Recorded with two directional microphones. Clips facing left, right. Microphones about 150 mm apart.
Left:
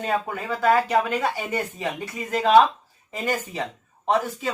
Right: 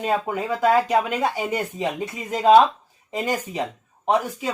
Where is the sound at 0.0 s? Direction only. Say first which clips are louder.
Right 3 dB; 20° right (ahead or behind).